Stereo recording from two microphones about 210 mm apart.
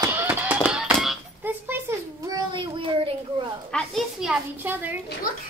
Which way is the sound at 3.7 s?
Centre (ahead or behind).